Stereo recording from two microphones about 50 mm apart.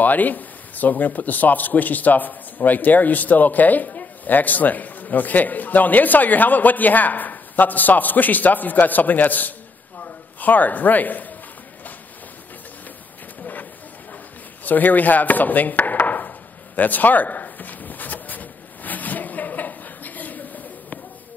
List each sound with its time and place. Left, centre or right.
0.0 s speech: left
10.0 s a sound: left
14.6 s chopping: left